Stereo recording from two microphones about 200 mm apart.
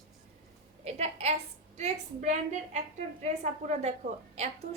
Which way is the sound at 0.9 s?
30° right (ahead or behind).